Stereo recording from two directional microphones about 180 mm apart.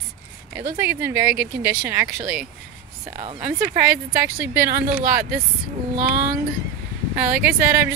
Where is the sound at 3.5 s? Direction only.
55° right (ahead or behind).